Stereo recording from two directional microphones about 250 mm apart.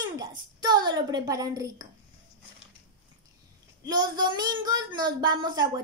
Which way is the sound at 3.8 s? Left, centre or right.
Centre.